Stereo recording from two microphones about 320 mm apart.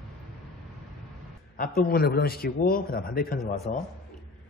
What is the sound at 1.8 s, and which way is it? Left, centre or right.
A man's voice, left.